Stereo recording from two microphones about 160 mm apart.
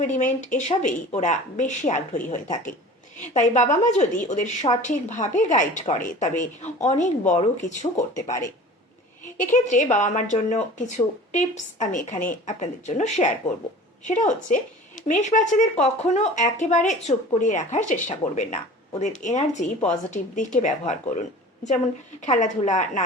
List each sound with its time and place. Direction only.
0.0 s a woman's voice: 50° left (ahead or behind)
9.5 s a woman's voice: 50° left (ahead or behind)
22.2 s a woman's voice: 50° left (ahead or behind)